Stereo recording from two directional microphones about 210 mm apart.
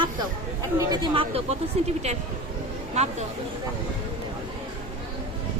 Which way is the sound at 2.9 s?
30° right (ahead or behind).